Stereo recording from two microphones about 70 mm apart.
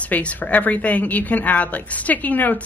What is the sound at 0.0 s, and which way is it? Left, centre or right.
A woman's voice, centre.